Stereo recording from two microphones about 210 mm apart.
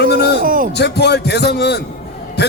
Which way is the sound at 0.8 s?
55° left (ahead or behind).